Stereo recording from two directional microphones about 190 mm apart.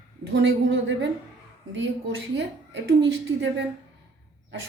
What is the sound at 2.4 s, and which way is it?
Speech, 65° right (ahead or behind).